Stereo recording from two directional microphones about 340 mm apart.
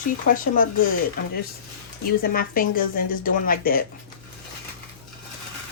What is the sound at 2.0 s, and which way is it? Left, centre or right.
Speech, left.